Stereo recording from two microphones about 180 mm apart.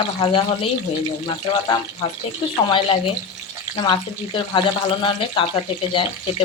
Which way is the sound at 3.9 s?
25° left (ahead or behind).